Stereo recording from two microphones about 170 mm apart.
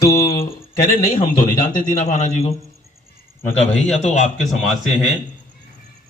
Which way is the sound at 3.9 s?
40° left (ahead or behind).